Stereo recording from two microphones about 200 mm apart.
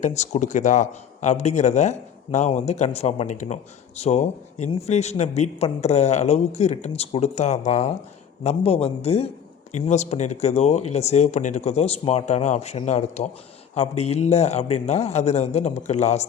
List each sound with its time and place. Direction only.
0.0 s a man's voice: 35° left (ahead or behind)